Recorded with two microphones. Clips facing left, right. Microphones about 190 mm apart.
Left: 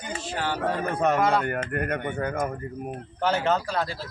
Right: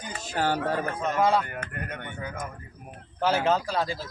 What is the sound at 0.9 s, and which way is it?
Speech, 65° left (ahead or behind).